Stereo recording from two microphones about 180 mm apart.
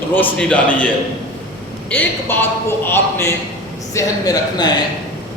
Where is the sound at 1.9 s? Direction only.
10° left (ahead or behind).